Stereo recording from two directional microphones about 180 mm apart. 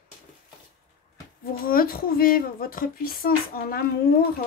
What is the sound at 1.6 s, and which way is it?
A woman's voice, 55° left (ahead or behind).